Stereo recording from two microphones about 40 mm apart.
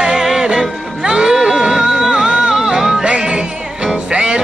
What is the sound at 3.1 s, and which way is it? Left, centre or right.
Music, right.